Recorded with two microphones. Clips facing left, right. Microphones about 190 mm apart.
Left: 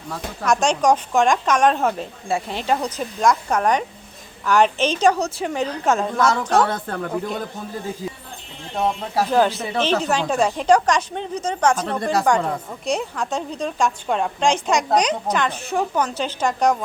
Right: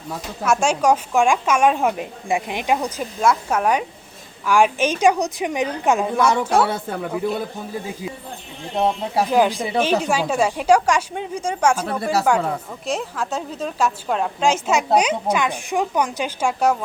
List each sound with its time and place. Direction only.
0.4 s a woman's voice: 5° right (ahead or behind)
9.3 s a woman's voice: 10° right (ahead or behind)